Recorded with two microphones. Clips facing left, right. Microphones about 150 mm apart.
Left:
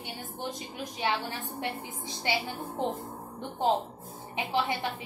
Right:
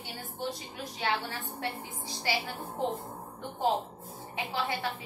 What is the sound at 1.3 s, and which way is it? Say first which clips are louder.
A woman's voice: left 2 dB; 20° left (ahead or behind).